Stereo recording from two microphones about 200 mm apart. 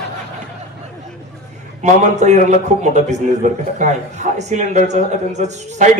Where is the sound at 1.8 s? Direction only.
35° right (ahead or behind).